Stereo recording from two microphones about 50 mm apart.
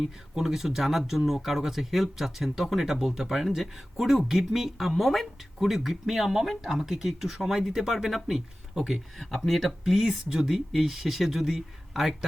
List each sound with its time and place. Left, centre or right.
0.0 s speech: centre